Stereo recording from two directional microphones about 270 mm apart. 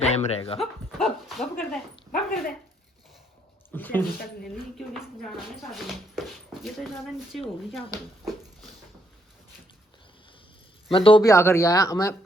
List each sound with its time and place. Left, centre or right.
0.0 s speech: left
0.6 s speech: centre
3.7 s speech: centre
5.7 s speech: centre
10.9 s speech: centre